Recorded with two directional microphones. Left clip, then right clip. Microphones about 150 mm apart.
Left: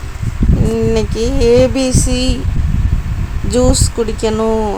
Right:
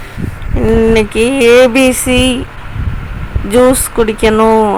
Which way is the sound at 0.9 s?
10° right (ahead or behind).